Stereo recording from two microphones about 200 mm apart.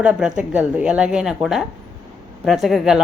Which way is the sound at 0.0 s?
5° right (ahead or behind).